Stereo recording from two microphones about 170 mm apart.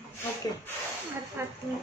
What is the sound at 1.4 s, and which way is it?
Speech, 15° right (ahead or behind).